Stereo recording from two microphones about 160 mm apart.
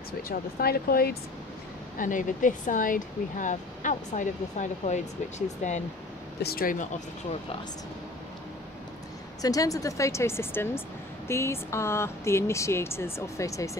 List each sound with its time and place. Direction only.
0.2 s speech: 70° left (ahead or behind)
2.0 s speech: 55° left (ahead or behind)
6.4 s speech: 65° left (ahead or behind)
9.4 s speech: 20° left (ahead or behind)